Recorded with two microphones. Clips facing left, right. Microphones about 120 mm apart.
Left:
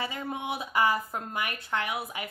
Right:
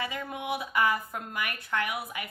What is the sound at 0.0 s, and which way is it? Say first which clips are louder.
Speech: left 1 dB; 30° left (ahead or behind).